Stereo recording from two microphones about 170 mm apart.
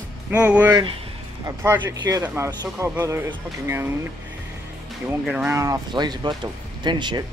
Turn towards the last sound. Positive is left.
turn(degrees=-25)  # may be behind; listen again after turning